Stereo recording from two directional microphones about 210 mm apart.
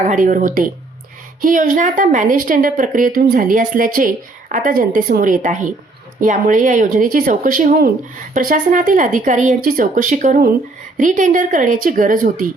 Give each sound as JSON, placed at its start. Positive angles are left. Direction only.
{"t": 0.0, "sound": "speech", "side_deg": -40}